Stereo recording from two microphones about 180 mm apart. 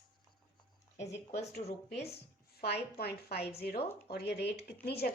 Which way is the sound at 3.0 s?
60° left (ahead or behind).